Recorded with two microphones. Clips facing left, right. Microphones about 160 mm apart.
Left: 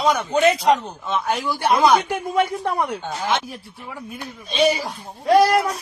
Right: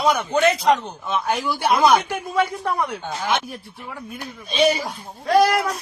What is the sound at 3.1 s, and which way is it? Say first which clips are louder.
Speech: even; 5° right (ahead or behind).